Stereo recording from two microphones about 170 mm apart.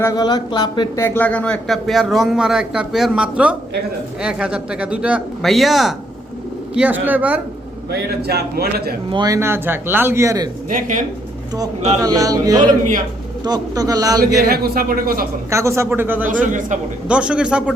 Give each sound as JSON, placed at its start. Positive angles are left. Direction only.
{"t": 0.0, "sound": "speech", "side_deg": 20}
{"t": 1.0, "sound": "a man's voice", "side_deg": 10}
{"t": 8.3, "sound": "speech", "side_deg": -70}
{"t": 9.0, "sound": "speech", "side_deg": -25}
{"t": 10.7, "sound": "speech", "side_deg": -50}
{"t": 11.9, "sound": "a man's voice", "side_deg": -20}
{"t": 14.4, "sound": "speech", "side_deg": -65}
{"t": 15.4, "sound": "speech", "side_deg": -15}
{"t": 16.5, "sound": "speech", "side_deg": -50}
{"t": 17.1, "sound": "speech", "side_deg": -5}